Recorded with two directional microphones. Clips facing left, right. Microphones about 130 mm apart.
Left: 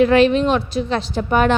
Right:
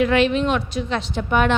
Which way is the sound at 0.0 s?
35° left (ahead or behind).